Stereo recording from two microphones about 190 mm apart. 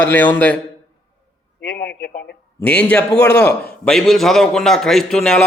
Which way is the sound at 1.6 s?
60° left (ahead or behind).